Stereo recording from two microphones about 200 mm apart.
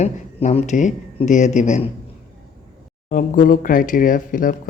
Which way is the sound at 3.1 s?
45° left (ahead or behind).